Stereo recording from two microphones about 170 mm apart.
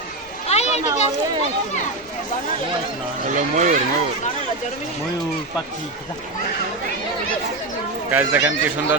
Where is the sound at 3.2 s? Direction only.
50° right (ahead or behind).